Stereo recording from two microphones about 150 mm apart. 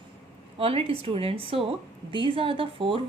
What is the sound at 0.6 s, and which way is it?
A woman's voice, 40° right (ahead or behind).